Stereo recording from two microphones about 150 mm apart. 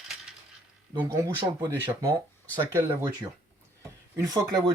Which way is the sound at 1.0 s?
20° right (ahead or behind).